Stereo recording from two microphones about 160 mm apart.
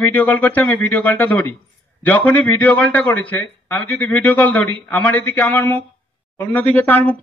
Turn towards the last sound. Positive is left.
turn(degrees=10)  # may be behind; listen again after turning